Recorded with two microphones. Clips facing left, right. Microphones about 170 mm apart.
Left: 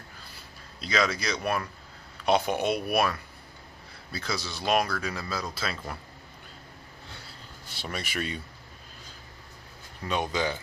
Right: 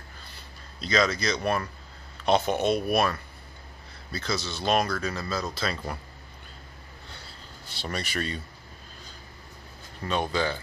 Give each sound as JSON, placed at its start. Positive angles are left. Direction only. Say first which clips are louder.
{"t": 0.7, "sound": "speech", "louder": "right 2 dB", "side_deg": 10}
{"t": 7.7, "sound": "speech", "louder": "right 2 dB", "side_deg": 5}
{"t": 10.0, "sound": "speech", "louder": "right 1 dB", "side_deg": 15}